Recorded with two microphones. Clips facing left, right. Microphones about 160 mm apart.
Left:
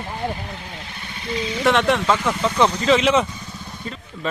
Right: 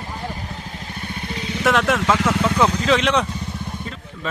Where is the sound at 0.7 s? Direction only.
45° right (ahead or behind).